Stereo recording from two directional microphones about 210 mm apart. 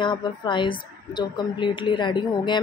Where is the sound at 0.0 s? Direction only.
20° left (ahead or behind).